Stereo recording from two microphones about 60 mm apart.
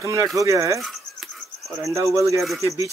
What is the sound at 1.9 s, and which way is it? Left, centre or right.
Speech, right.